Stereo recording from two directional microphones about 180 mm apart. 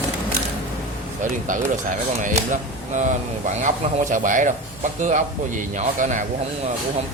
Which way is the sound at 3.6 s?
40° right (ahead or behind).